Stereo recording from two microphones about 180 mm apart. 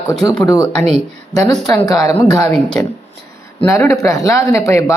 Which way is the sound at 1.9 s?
15° left (ahead or behind).